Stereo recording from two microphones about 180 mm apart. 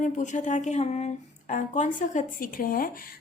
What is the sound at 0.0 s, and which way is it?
A woman's voice, 45° left (ahead or behind).